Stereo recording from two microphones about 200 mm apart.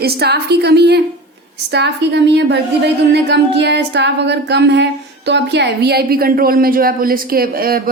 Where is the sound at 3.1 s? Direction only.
55° right (ahead or behind).